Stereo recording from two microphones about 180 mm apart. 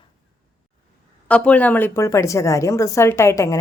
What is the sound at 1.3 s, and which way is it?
A woman's voice, 5° left (ahead or behind).